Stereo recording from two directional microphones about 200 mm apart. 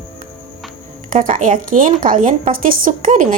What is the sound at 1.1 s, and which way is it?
A woman's voice, 40° right (ahead or behind).